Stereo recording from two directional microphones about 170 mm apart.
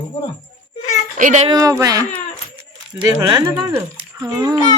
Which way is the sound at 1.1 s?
50° right (ahead or behind).